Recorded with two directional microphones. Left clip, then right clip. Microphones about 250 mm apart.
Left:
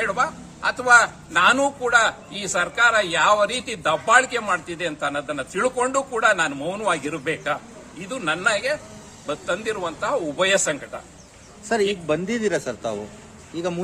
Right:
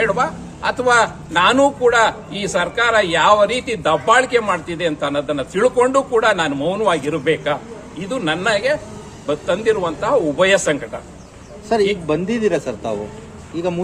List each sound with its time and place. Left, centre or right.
0.0 s a man's voice: centre
11.7 s a man's voice: left